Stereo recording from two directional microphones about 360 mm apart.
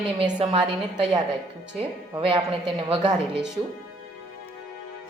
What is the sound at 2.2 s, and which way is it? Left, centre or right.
Speech, centre.